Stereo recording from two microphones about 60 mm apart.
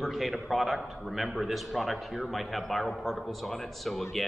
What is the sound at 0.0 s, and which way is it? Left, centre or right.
A man's voice, centre.